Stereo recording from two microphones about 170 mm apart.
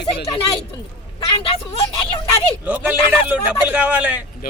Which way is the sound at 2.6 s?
10° right (ahead or behind).